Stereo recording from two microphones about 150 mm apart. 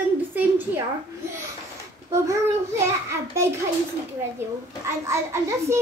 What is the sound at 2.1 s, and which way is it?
Speech, 20° right (ahead or behind).